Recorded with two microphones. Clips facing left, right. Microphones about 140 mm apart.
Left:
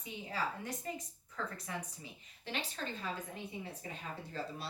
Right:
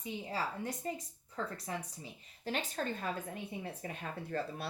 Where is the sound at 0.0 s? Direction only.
30° right (ahead or behind).